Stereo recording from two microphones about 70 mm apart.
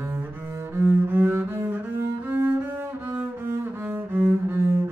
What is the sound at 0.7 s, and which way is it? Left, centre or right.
Cello, right.